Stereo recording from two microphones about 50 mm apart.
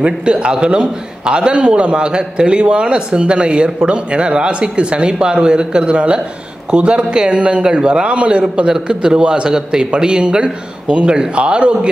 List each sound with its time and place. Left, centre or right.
0.0 s a man's voice: right